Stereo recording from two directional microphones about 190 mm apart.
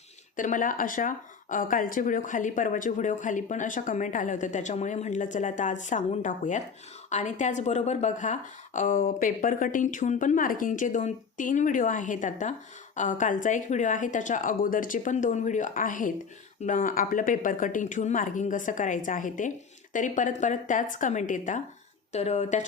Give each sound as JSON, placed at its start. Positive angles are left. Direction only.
{"t": 0.3, "sound": "speech", "side_deg": 45}